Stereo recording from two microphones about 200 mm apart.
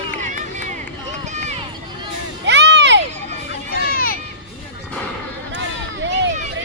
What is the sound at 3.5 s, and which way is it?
Run, 50° left (ahead or behind).